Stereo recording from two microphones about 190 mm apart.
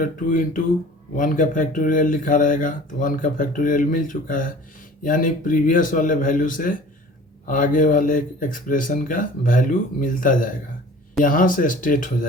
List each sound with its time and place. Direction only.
0.0 s speech: 45° left (ahead or behind)